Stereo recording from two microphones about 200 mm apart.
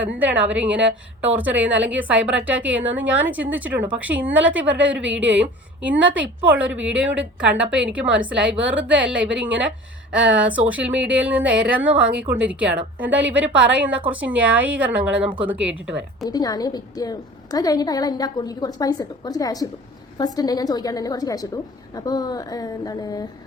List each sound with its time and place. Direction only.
0.2 s a woman's voice: 5° right (ahead or behind)
16.2 s a woman's voice: 20° left (ahead or behind)